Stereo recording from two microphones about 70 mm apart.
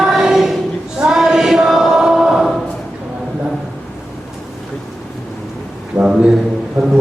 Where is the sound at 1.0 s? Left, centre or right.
Centre.